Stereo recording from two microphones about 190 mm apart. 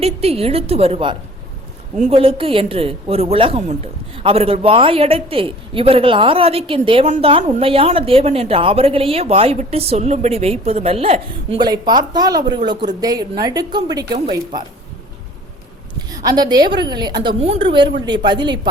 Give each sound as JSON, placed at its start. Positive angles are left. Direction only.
{"t": 0.0, "sound": "a woman's voice", "side_deg": -30}
{"t": 16.0, "sound": "a woman's voice", "side_deg": -20}